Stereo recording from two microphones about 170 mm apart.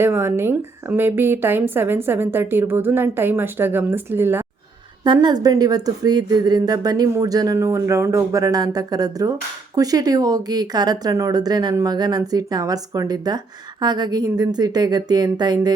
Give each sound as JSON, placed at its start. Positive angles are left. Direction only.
{"t": 0.0, "sound": "a woman's voice", "side_deg": -15}
{"t": 5.0, "sound": "speech", "side_deg": -25}